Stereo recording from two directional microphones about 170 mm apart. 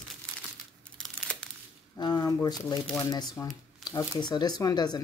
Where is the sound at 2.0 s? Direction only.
25° left (ahead or behind).